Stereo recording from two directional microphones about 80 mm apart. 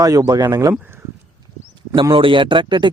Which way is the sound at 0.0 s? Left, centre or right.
Right.